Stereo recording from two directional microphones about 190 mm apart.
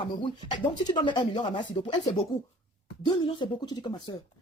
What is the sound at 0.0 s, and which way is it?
Speech, 25° left (ahead or behind).